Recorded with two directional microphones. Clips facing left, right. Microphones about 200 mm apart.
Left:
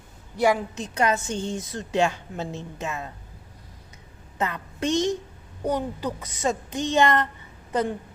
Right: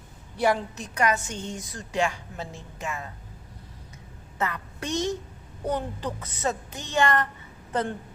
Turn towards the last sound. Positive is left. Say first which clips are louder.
# left 3 dB
turn(degrees=10)  # may be behind; listen again after turning